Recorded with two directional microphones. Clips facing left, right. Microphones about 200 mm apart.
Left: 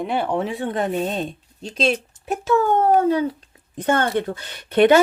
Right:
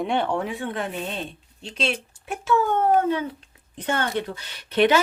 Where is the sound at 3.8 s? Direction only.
50° left (ahead or behind).